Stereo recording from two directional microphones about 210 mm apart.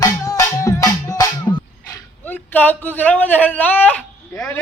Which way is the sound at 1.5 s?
15° left (ahead or behind).